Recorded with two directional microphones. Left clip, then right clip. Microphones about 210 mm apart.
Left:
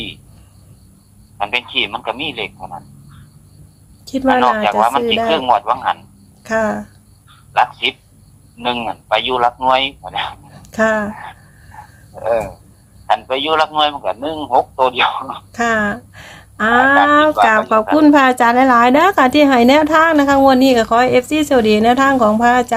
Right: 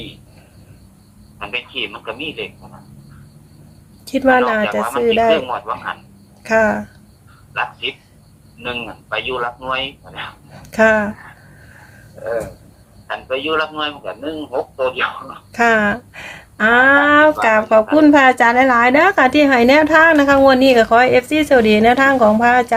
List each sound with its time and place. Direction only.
1.4 s a man's voice: 55° left (ahead or behind)
4.0 s speech: centre (ahead or behind)
4.6 s a man's voice: 55° left (ahead or behind)
6.4 s speech: 5° left (ahead or behind)
7.5 s a man's voice: 55° left (ahead or behind)
10.5 s a sound: 5° left (ahead or behind)
13.1 s a man's voice: 55° left (ahead or behind)
15.5 s a woman's voice: 5° left (ahead or behind)